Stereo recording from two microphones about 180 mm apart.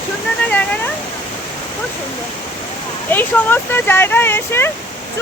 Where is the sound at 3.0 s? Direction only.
10° left (ahead or behind).